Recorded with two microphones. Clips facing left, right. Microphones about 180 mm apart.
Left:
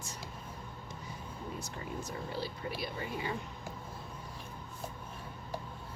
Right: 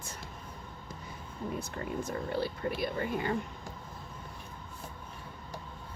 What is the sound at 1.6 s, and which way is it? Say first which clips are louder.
Speech: right 5 dB; 55° right (ahead or behind).